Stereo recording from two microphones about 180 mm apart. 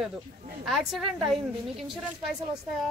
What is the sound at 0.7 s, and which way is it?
Speech, centre (ahead or behind).